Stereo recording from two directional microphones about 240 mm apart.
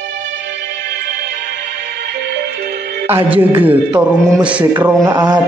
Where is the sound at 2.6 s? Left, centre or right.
Right.